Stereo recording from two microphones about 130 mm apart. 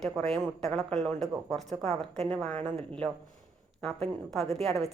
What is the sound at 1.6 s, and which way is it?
Speech, 60° right (ahead or behind).